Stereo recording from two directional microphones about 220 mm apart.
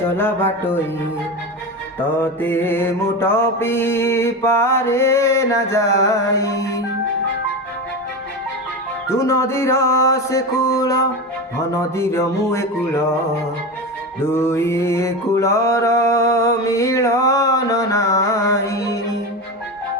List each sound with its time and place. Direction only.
0.2 s mantra: 10° left (ahead or behind)
2.0 s mantra: 10° left (ahead or behind)
9.0 s mantra: 15° left (ahead or behind)
14.2 s mantra: 10° left (ahead or behind)